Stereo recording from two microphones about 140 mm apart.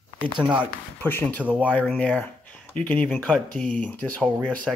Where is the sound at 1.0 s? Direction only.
15° left (ahead or behind).